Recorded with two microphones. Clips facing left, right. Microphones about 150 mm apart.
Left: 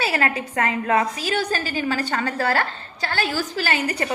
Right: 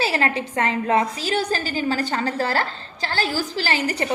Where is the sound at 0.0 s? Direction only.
30° right (ahead or behind).